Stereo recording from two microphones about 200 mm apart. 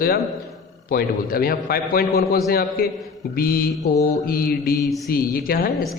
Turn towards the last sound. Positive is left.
turn(degrees=45)  # may be behind; listen again after turning